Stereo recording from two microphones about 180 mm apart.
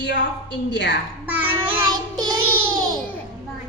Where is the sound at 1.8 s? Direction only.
20° right (ahead or behind).